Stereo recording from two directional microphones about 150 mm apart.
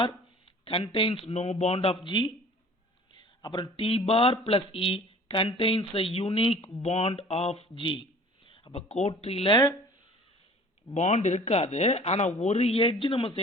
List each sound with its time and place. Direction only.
0.0 s speech: 35° left (ahead or behind)
3.4 s speech: 30° left (ahead or behind)
10.9 s speech: 50° left (ahead or behind)